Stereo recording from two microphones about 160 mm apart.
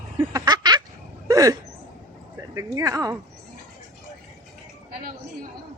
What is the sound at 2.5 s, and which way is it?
Speech, 20° right (ahead or behind).